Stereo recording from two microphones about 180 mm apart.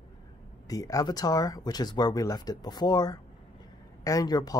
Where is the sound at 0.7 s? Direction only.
20° left (ahead or behind).